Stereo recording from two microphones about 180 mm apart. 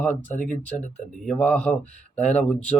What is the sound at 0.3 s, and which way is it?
Speech, 45° left (ahead or behind).